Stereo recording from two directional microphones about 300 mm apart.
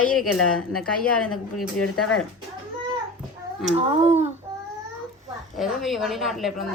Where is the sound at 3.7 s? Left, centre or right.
Right.